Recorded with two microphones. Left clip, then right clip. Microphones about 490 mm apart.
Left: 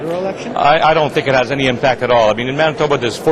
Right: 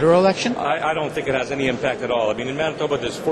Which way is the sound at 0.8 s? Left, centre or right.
Left.